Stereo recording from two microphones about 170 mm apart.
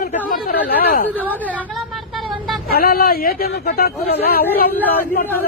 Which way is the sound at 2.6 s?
65° left (ahead or behind).